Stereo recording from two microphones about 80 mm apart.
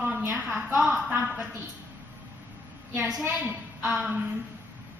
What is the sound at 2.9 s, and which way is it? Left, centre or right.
A woman's voice, centre.